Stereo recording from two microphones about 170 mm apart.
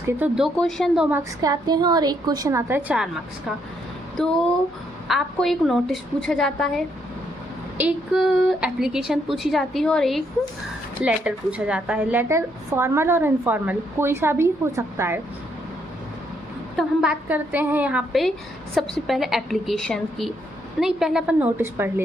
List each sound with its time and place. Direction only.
0.2 s a woman's voice: 5° right (ahead or behind)
1.1 s a woman's voice: 20° right (ahead or behind)
5.0 s a woman's voice: centre (ahead or behind)
16.7 s a woman's voice: 5° right (ahead or behind)